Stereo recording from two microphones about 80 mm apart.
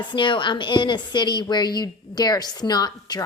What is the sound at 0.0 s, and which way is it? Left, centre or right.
A woman's voice, left.